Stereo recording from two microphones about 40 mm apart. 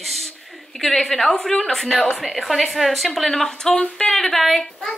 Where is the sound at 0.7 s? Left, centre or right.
Centre.